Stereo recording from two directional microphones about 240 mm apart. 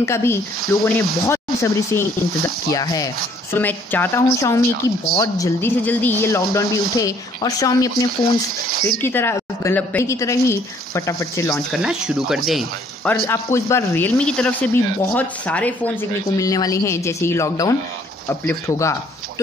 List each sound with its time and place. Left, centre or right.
0.0 s speech: centre
8.6 s speech: right
9.0 s speech: centre
11.7 s speech: centre
13.1 s speech: centre